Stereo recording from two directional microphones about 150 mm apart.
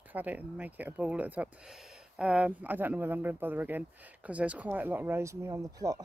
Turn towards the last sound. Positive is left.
turn(degrees=-25)  # may be behind; listen again after turning